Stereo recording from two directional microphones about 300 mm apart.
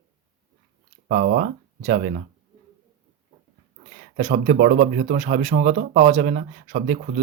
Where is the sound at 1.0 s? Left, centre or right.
Right.